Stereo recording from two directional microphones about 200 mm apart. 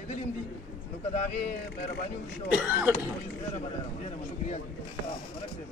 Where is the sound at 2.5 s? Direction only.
10° right (ahead or behind).